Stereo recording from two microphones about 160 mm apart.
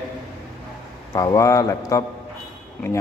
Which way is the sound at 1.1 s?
20° left (ahead or behind).